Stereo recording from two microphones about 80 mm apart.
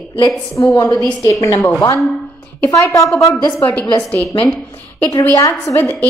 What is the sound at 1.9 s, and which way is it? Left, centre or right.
Speech, centre.